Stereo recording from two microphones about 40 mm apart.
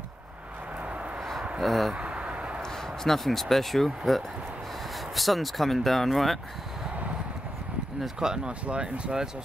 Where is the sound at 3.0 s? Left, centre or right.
Centre.